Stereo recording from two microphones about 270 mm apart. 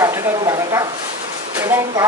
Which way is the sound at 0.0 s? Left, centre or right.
Centre.